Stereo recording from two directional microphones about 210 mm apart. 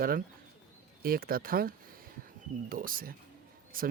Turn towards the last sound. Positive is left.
turn(degrees=-40)  # may be behind; listen again after turning